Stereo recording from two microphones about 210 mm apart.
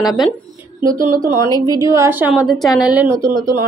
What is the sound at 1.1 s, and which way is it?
Speech, 40° right (ahead or behind).